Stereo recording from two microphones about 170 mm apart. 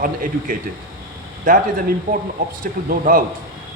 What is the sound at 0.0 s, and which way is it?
A man's voice, 55° right (ahead or behind).